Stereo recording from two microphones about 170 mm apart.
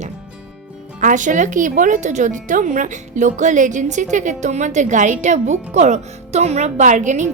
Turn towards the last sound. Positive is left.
turn(degrees=-45)  # may be behind; listen again after turning